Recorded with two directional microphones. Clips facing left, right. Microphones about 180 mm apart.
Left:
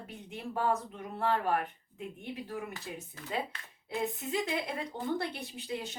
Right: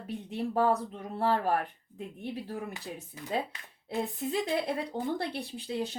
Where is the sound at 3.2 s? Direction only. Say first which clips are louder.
Right 3 dB; 15° right (ahead or behind).